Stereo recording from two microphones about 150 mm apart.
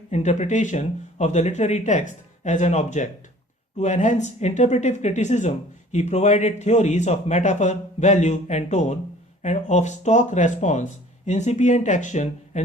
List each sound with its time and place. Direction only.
0.1 s speech: 50° left (ahead or behind)